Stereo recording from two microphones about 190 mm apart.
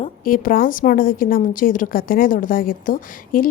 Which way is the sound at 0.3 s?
50° left (ahead or behind).